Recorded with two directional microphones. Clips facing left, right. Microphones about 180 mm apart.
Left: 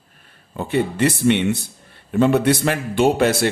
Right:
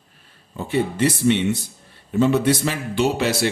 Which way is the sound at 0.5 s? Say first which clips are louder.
Left 1 dB; 60° left (ahead or behind).